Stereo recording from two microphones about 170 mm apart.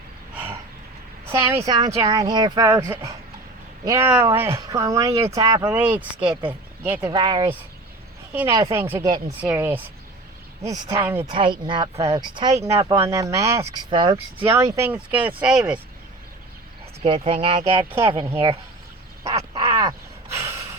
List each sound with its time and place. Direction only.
1.3 s speech: 15° right (ahead or behind)
2.6 s speech: 10° right (ahead or behind)
5.6 s speech: 10° right (ahead or behind)
7.1 s speech: 30° right (ahead or behind)
8.3 s speech: 10° right (ahead or behind)
11.3 s speech: 30° right (ahead or behind)
14.4 s speech: 15° right (ahead or behind)
17.2 s speech: 30° right (ahead or behind)
19.2 s a sound: 20° right (ahead or behind)